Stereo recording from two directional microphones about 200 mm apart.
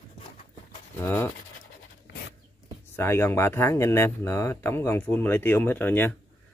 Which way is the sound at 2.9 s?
10° left (ahead or behind).